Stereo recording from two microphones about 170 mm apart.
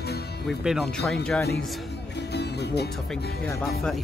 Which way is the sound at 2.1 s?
80° left.